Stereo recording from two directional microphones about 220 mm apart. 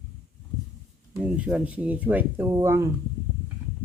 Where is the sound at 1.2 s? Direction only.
5° right (ahead or behind).